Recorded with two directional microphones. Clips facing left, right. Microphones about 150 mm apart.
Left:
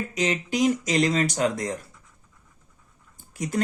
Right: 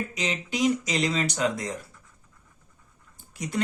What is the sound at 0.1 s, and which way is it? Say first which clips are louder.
Speech: left 5 dB; 45° left (ahead or behind).